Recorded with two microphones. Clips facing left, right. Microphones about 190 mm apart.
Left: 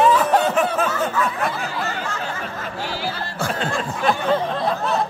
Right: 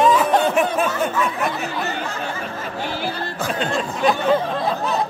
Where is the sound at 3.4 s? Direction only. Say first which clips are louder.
Right 1 dB; 15° right (ahead or behind).